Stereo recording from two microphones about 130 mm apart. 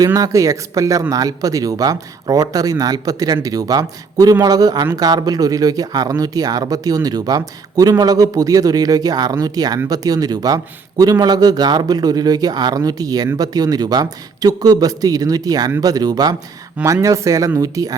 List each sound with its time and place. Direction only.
0.0 s speech: 25° right (ahead or behind)